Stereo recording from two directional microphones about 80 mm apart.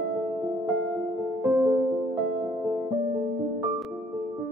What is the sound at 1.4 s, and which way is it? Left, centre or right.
Music, right.